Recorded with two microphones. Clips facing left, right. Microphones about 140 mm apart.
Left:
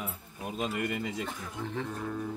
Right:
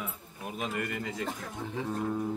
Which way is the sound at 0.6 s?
10° left (ahead or behind).